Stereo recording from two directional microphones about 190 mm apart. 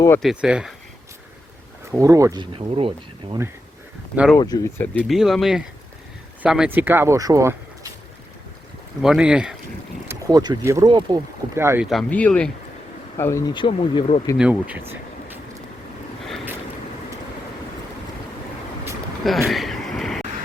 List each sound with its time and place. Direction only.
0.2 s speech: 5° right (ahead or behind)
1.9 s speech: 15° right (ahead or behind)
4.1 s speech: 5° right (ahead or behind)
4.4 s speech: 20° left (ahead or behind)
4.8 s speech: 5° left (ahead or behind); by 7.9 s 15° right (ahead or behind)
9.0 s speech: 5° right (ahead or behind)
10.1 s speech: 20° right (ahead or behind)
11.5 s speech: 15° right (ahead or behind)
11.9 s speech: 5° left (ahead or behind); by 14.2 s 30° left (ahead or behind)
14.3 s speech: 5° right (ahead or behind)
19.5 s vehicle: centre (ahead or behind)